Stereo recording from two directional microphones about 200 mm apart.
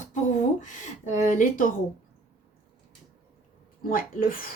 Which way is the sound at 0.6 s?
40° left (ahead or behind).